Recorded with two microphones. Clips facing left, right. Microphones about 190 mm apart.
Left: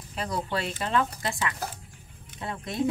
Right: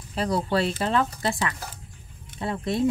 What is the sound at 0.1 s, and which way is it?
Speech, 35° right (ahead or behind).